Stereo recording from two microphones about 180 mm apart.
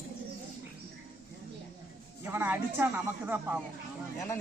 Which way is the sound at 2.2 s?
10° right (ahead or behind).